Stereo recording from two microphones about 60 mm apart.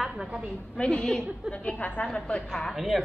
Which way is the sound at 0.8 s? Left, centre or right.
Centre.